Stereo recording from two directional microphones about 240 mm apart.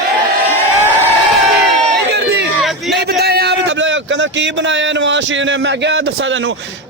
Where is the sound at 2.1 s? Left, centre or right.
Right.